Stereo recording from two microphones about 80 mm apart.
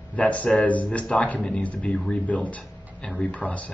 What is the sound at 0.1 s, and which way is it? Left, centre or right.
Speech, centre.